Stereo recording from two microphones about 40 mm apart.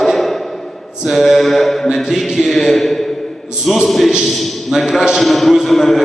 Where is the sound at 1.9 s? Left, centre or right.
Centre.